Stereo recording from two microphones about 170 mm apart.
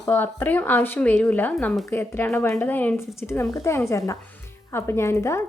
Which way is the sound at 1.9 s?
15° left (ahead or behind).